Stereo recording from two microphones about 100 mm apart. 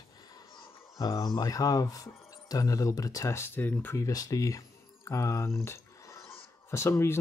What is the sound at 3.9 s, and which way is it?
Speech, 35° left (ahead or behind).